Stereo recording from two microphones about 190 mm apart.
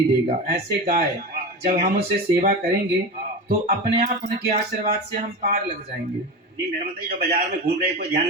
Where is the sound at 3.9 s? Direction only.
45° right (ahead or behind).